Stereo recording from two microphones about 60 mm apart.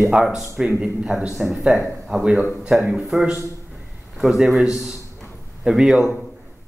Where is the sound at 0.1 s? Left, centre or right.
Centre.